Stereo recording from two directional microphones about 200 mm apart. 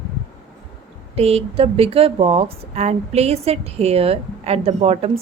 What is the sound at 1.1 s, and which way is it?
Speech, 30° right (ahead or behind).